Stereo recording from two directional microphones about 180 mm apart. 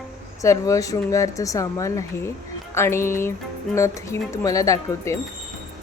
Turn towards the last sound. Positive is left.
turn(degrees=15)  # may be behind; listen again after turning